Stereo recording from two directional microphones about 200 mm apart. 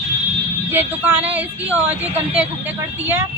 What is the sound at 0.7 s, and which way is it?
A woman's voice, 10° right (ahead or behind).